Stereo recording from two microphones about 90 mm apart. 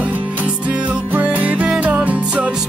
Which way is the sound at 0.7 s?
15° right (ahead or behind).